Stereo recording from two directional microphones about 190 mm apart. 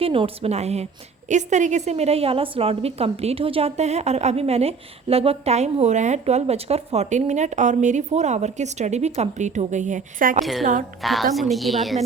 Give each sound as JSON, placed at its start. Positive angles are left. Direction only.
{"t": 0.0, "sound": "a woman's voice", "side_deg": -30}
{"t": 10.4, "sound": "a woman's voice", "side_deg": 0}